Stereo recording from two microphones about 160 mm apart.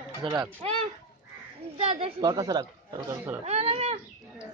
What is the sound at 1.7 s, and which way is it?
Speech, 40° right (ahead or behind).